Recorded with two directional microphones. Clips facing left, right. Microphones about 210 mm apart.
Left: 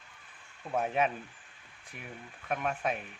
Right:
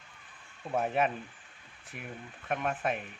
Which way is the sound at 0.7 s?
Centre (ahead or behind).